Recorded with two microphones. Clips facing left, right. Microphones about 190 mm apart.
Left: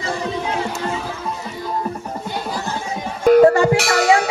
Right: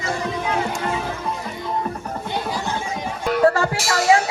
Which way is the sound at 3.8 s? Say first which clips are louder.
Left 2 dB; 65° left (ahead or behind).